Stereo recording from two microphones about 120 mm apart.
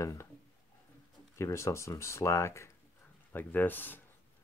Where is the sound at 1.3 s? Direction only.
25° left (ahead or behind).